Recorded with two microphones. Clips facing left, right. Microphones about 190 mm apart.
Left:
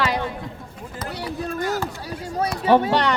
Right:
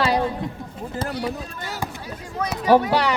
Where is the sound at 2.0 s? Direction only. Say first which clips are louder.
Left 3 dB; 35° left (ahead or behind).